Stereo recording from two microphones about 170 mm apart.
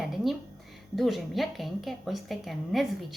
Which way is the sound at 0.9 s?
Centre (ahead or behind).